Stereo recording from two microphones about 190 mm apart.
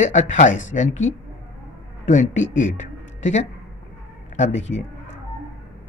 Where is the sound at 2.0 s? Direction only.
40° left (ahead or behind).